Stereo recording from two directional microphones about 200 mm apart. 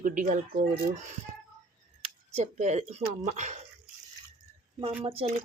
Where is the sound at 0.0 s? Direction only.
40° right (ahead or behind).